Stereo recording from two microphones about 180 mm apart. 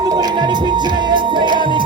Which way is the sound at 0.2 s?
25° right (ahead or behind).